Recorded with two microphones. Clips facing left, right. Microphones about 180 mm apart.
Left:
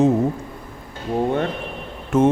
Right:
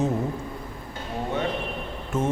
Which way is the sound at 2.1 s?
75° left (ahead or behind).